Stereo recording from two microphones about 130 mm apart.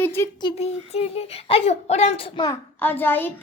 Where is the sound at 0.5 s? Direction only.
50° left (ahead or behind).